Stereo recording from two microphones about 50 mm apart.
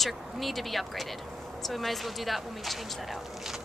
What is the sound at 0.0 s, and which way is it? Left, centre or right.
A woman's voice, centre.